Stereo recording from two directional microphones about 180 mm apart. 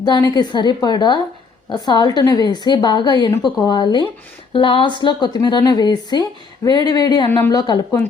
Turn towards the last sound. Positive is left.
turn(degrees=20)  # may be behind; listen again after turning